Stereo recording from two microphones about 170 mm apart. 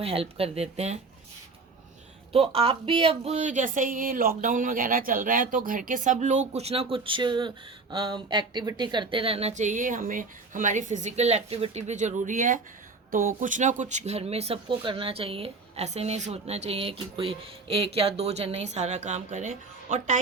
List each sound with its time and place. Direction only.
0.0 s speech: 35° right (ahead or behind)
2.3 s speech: 35° right (ahead or behind)